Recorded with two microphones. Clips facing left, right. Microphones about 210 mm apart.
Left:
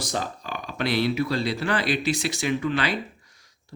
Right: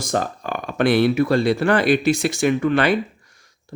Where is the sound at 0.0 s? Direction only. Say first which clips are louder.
Right 7 dB; 50° right (ahead or behind).